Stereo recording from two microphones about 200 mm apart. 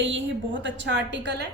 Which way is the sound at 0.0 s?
65° right (ahead or behind).